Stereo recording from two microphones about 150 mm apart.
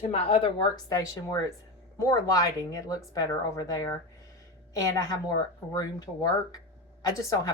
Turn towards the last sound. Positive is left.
turn(degrees=25)  # may be behind; listen again after turning